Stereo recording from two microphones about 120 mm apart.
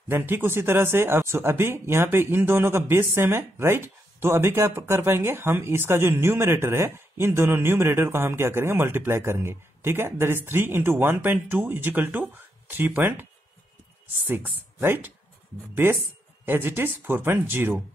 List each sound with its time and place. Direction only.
0.1 s speech: 15° right (ahead or behind)